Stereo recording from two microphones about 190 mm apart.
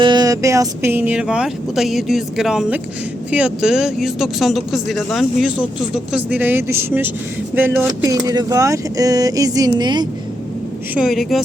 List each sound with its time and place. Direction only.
0.0 s speech: 20° right (ahead or behind)
10.9 s speech: centre (ahead or behind)